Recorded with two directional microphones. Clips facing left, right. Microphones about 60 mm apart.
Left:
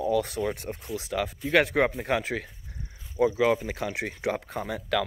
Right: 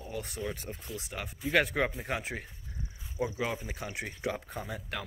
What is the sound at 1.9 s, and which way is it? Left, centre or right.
Speech, left.